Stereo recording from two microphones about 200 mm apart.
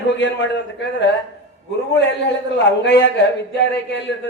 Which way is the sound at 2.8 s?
60° left (ahead or behind).